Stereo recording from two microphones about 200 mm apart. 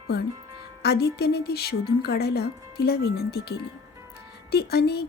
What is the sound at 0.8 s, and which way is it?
Music, 55° left (ahead or behind).